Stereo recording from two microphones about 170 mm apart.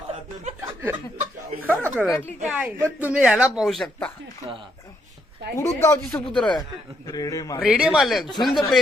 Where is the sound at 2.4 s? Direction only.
5° right (ahead or behind).